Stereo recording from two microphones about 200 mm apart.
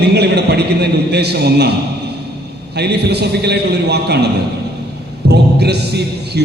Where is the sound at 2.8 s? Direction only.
55° right (ahead or behind).